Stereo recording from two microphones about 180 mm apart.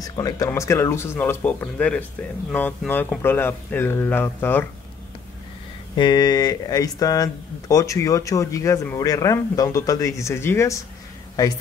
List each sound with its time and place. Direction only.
0.0 s speech: 20° left (ahead or behind)
5.9 s speech: 25° left (ahead or behind)